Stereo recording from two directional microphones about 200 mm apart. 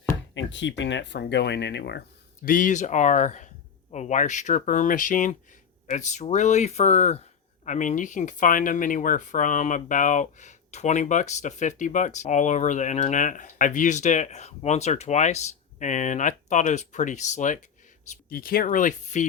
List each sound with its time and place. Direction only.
0.3 s speech: 65° left (ahead or behind); by 19.3 s 35° left (ahead or behind)